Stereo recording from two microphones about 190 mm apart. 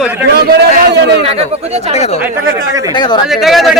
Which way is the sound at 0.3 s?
55° right (ahead or behind).